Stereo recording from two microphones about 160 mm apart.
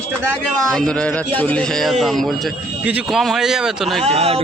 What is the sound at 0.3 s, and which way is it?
Speech, 5° left (ahead or behind).